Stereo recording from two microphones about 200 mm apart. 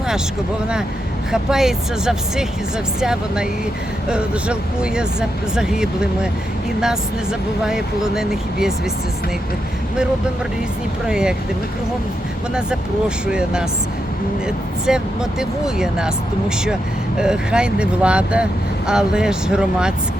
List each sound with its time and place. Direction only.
1.3 s speech: centre (ahead or behind)
7.6 s speech: 5° right (ahead or behind)
11.0 s speech: 5° right (ahead or behind)
13.3 s speech: 5° right (ahead or behind)
17.2 s speech: 5° right (ahead or behind)